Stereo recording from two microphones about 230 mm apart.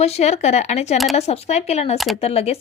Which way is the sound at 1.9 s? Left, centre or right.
Centre.